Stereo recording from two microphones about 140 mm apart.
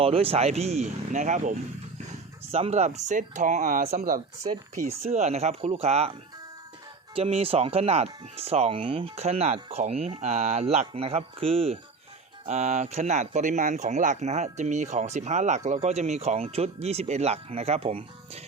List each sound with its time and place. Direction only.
0.0 s speech: 45° right (ahead or behind); by 1.5 s 60° right (ahead or behind)
2.5 s speech: 50° right (ahead or behind); by 4.2 s 80° right
4.9 s speech: 50° right (ahead or behind)
7.2 s speech: 45° right (ahead or behind)